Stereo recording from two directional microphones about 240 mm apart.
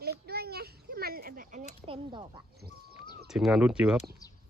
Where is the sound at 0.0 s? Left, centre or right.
Right.